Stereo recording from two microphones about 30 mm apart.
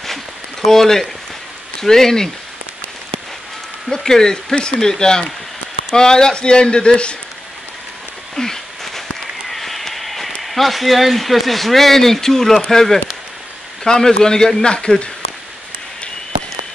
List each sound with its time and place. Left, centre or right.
0.7 s speech: centre
3.9 s a man's voice: centre; by 7.2 s left
8.4 s a sound: centre
10.4 s a man's voice: centre; by 15.0 s left